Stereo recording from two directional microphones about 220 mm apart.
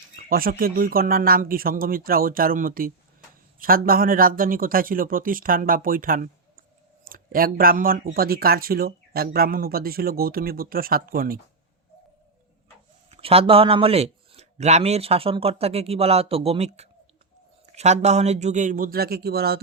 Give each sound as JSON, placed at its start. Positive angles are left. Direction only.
{"t": 0.2, "sound": "speech", "side_deg": -40}
{"t": 13.1, "sound": "speech", "side_deg": -25}